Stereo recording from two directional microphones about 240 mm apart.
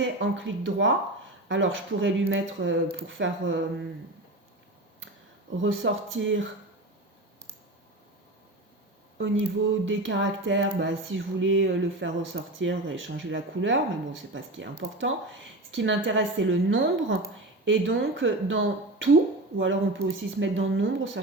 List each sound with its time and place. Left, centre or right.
0.0 s speech: right
5.6 s speech: right
9.1 s speech: right